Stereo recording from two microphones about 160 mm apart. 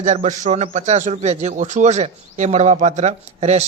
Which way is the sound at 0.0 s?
50° right (ahead or behind).